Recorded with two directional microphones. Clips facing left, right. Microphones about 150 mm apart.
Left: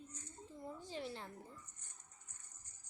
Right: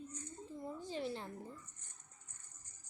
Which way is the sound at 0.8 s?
20° right (ahead or behind).